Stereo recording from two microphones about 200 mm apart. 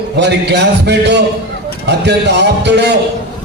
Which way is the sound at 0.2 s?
60° right (ahead or behind).